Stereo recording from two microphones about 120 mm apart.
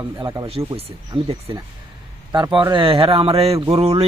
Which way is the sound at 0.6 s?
45° right (ahead or behind).